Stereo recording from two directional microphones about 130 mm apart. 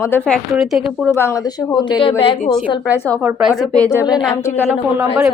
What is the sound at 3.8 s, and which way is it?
Speech, 20° left (ahead or behind).